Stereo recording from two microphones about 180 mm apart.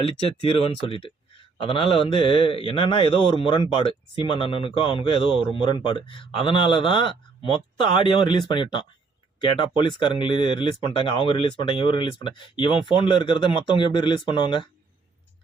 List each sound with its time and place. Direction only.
0.0 s speech: 30° left (ahead or behind)